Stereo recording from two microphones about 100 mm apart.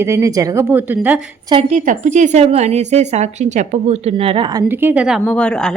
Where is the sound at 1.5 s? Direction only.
45° right (ahead or behind).